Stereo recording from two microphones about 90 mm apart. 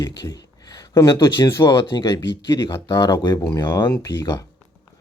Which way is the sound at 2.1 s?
35° left (ahead or behind).